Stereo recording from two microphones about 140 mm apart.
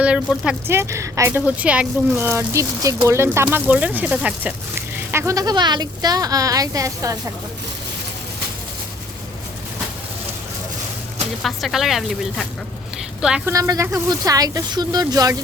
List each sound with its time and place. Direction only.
0.0 s speech: 5° right (ahead or behind)
0.7 s speech: 20° right (ahead or behind)
1.3 s speech: 10° right (ahead or behind)
5.1 s speech: 25° right (ahead or behind)
11.4 s speech: centre (ahead or behind)
13.4 s speech: 25° right (ahead or behind)